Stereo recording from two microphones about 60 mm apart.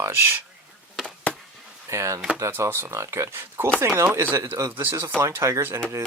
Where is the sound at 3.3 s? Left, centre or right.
Right.